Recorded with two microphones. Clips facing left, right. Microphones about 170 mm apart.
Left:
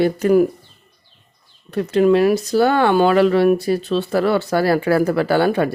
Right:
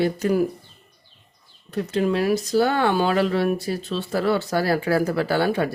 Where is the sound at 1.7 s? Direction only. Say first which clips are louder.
Left 8 dB; 65° left (ahead or behind).